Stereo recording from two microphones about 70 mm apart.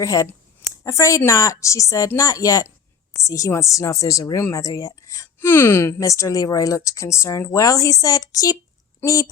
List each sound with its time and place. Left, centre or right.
0.0 s speech: left
4.4 s speech: left
5.4 s speech: left
6.0 s speech: left